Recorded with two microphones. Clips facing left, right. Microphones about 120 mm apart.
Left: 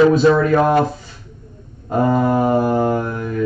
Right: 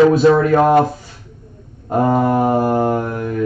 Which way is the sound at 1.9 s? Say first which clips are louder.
Right 1 dB; 50° right (ahead or behind).